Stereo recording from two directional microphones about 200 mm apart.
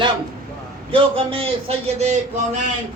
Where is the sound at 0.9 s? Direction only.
25° right (ahead or behind).